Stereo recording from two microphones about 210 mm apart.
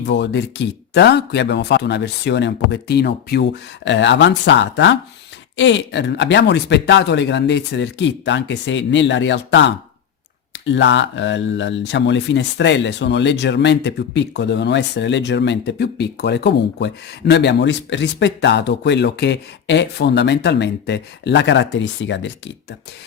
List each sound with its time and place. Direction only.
0.0 s speech: 55° left (ahead or behind)